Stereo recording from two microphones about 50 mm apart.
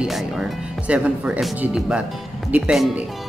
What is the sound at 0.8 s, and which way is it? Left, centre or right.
Music, right.